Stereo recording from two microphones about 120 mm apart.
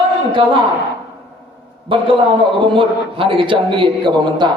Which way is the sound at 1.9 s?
45° right (ahead or behind).